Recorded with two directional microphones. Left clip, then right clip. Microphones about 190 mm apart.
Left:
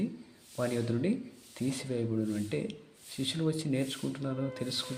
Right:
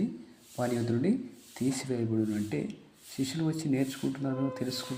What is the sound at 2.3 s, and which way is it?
Sanding, 20° left (ahead or behind).